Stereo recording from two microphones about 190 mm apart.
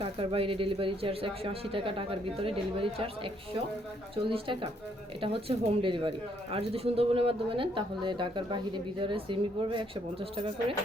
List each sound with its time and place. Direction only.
0.0 s speech: 30° right (ahead or behind)